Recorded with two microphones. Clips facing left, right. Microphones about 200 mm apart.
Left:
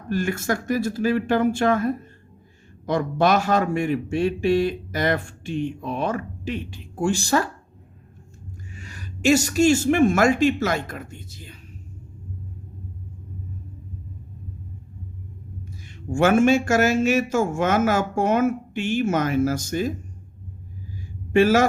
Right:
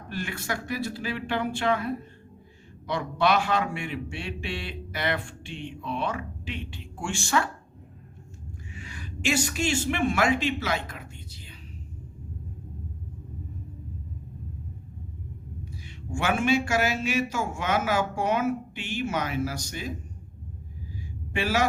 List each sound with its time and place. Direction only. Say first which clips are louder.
0.1 s a man's voice: left 9 dB; 45° left (ahead or behind)
8.7 s a man's voice: right 1 dB; 40° left (ahead or behind)
16.1 s a man's voice: left 8 dB; 45° left (ahead or behind)
21.3 s a man's voice: left 9 dB; 45° left (ahead or behind)